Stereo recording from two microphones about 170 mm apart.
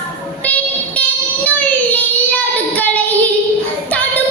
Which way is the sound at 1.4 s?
10° left (ahead or behind).